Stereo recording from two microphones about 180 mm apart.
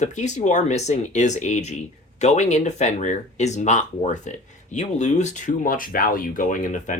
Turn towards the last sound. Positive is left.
turn(degrees=45)  # may be behind; listen again after turning